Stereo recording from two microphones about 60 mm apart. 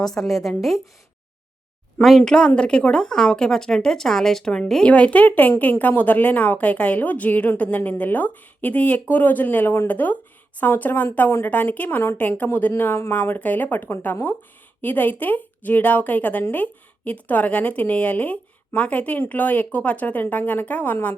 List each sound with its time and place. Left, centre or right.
0.0 s a woman's voice: centre
2.0 s a woman's voice: centre
2.2 s speech: centre
4.9 s a woman's voice: left